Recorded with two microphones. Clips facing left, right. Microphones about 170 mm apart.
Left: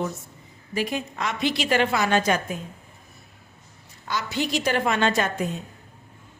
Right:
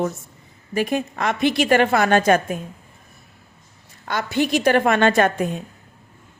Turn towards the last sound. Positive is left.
turn(degrees=-55)  # may be behind; listen again after turning